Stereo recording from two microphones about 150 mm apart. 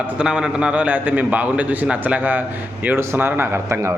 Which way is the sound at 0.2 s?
5° right (ahead or behind).